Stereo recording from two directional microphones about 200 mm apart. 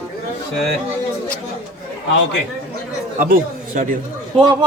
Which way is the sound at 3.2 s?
45° right (ahead or behind).